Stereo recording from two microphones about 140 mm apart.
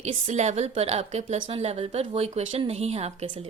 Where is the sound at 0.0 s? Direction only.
55° right (ahead or behind).